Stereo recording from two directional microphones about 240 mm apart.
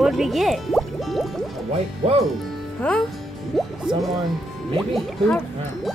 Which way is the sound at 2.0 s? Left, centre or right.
Right.